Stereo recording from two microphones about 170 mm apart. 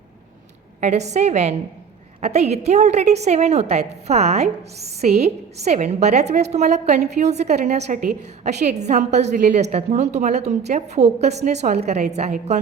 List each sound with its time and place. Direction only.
0.8 s a woman's voice: 40° right (ahead or behind)